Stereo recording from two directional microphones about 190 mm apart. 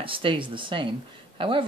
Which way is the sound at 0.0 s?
25° right (ahead or behind).